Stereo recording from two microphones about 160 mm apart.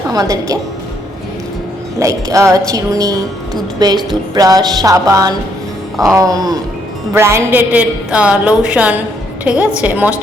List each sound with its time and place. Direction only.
0.1 s a woman's voice: 25° right (ahead or behind)
2.0 s a woman's voice: 20° right (ahead or behind)